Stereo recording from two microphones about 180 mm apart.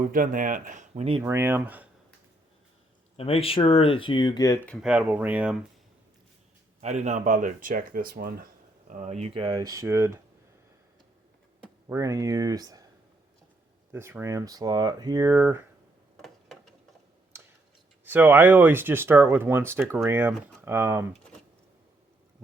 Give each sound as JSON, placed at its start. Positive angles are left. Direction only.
{"t": 0.1, "sound": "speech", "side_deg": -50}
{"t": 1.2, "sound": "speech", "side_deg": -15}
{"t": 3.2, "sound": "speech", "side_deg": 30}
{"t": 4.7, "sound": "speech", "side_deg": -5}
{"t": 6.8, "sound": "speech", "side_deg": -40}
{"t": 11.9, "sound": "speech", "side_deg": -20}
{"t": 13.9, "sound": "speech", "side_deg": -15}
{"t": 18.0, "sound": "speech", "side_deg": -10}